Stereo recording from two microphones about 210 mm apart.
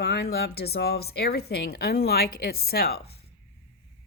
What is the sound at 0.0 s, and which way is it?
Speech, 50° left (ahead or behind).